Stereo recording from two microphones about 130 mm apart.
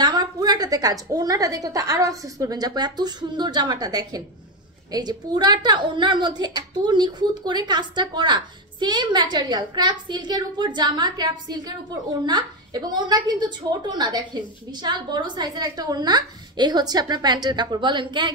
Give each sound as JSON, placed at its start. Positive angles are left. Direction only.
{"t": 0.0, "sound": "a woman's voice", "side_deg": -30}